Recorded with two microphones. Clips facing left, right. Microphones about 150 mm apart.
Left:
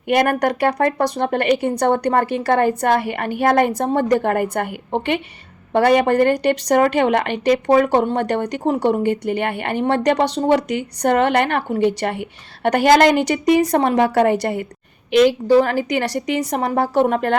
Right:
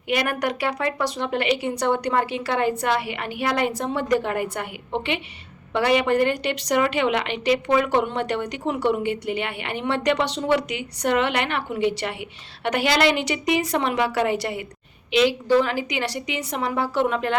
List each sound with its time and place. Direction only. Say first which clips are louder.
0.1 s speech: left 7 dB; 45° left (ahead or behind)